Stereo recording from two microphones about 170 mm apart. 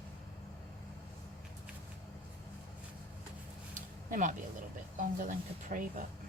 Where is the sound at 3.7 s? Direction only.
50° right (ahead or behind).